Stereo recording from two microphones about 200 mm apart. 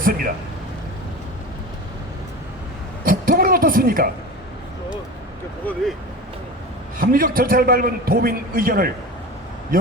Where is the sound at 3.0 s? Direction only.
45° right (ahead or behind).